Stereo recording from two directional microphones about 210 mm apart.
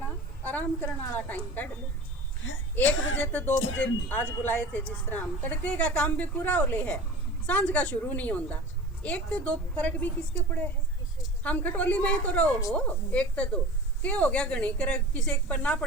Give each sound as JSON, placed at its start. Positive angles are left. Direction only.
{"t": 0.4, "sound": "speech", "side_deg": 10}
{"t": 2.4, "sound": "a woman's voice", "side_deg": 65}
{"t": 3.2, "sound": "speech", "side_deg": 10}
{"t": 11.4, "sound": "a woman's voice", "side_deg": 5}